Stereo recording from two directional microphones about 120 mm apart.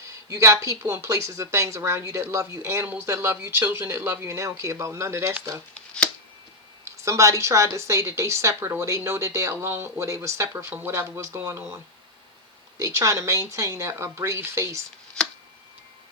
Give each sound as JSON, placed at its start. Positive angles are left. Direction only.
{"t": 0.3, "sound": "speech", "side_deg": -25}
{"t": 5.7, "sound": "shuffling cards", "side_deg": 5}
{"t": 6.8, "sound": "speech", "side_deg": -25}
{"t": 12.8, "sound": "speech", "side_deg": -25}
{"t": 15.2, "sound": "tick-tock", "side_deg": 5}